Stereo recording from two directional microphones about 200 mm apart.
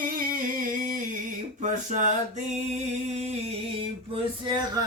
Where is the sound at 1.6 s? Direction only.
40° right (ahead or behind).